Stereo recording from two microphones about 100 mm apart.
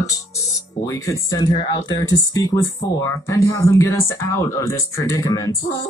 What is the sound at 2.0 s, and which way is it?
Speech, 35° left (ahead or behind).